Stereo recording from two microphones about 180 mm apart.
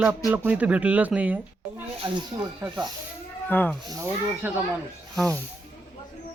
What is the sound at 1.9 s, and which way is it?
Speech, 25° right (ahead or behind).